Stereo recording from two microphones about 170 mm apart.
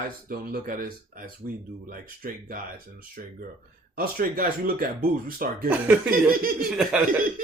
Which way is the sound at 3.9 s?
55° right (ahead or behind).